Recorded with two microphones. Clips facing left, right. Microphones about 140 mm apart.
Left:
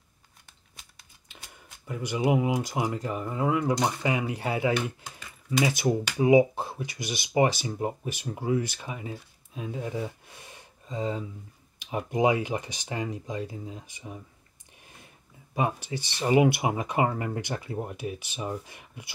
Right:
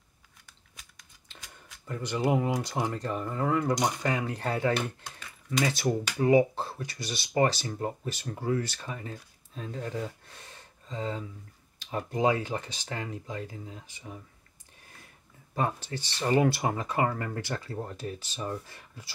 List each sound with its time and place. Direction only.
1.9 s speech: 10° left (ahead or behind)
14.8 s a sound: 15° left (ahead or behind)
15.5 s speech: 10° left (ahead or behind)